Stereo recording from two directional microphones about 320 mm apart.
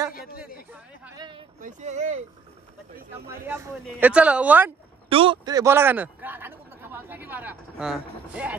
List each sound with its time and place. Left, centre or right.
1.0 s a sound: centre
1.6 s speech: right
3.3 s speech: centre
5.1 s a man's voice: centre